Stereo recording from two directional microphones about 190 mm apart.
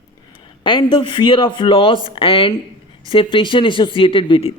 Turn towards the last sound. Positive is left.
turn(degrees=30)  # may be behind; listen again after turning